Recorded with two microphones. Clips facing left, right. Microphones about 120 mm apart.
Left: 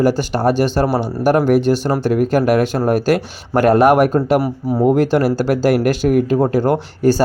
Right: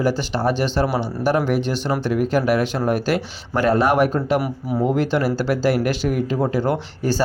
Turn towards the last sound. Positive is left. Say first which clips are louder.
# left 7 dB
turn(degrees=45)  # may be behind; listen again after turning